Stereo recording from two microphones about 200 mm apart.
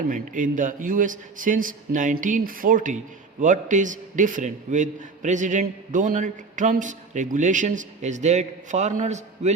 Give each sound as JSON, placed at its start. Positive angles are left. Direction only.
{"t": 0.1, "sound": "a man's voice", "side_deg": -40}